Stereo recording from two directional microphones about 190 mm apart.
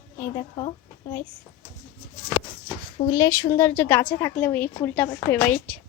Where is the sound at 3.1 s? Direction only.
15° left (ahead or behind).